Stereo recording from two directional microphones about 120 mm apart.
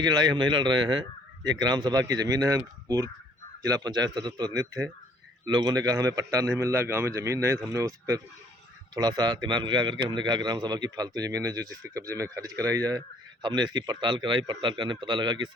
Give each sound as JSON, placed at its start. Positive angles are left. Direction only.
{"t": 0.0, "sound": "a man's voice", "side_deg": -35}